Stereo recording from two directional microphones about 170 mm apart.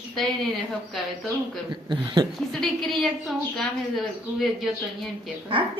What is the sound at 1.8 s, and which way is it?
Speech, 30° right (ahead or behind).